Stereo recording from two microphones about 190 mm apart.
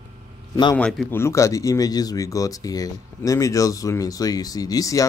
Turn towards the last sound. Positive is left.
turn(degrees=20)  # may be behind; listen again after turning